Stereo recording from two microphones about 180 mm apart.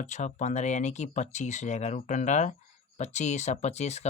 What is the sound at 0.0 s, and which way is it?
Speech, 40° left (ahead or behind).